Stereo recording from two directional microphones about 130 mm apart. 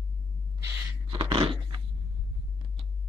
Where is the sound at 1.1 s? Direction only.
45° right (ahead or behind).